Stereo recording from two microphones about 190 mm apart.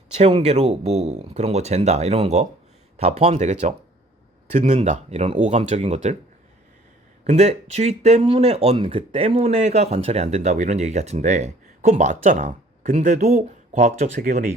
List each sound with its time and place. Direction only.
0.2 s speech: 35° right (ahead or behind)
7.3 s speech: 35° right (ahead or behind)